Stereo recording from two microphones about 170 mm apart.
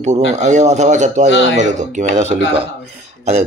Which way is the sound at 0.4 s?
45° right (ahead or behind).